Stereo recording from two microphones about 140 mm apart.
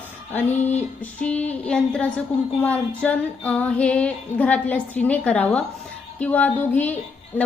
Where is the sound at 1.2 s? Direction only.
10° left (ahead or behind).